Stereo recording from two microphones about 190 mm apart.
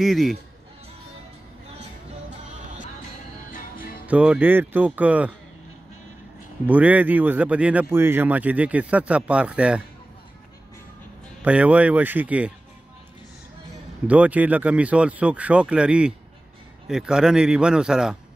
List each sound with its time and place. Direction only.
0.0 s a man's voice: centre (ahead or behind)
3.5 s music: 45° left (ahead or behind)
4.0 s speech: 5° right (ahead or behind)
6.6 s speech: 10° right (ahead or behind)
11.4 s speech: 5° right (ahead or behind)
14.0 s a man's voice: 5° right (ahead or behind)